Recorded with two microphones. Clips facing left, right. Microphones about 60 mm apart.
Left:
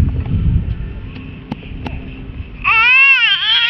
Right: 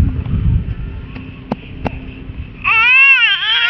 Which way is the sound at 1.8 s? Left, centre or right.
Right.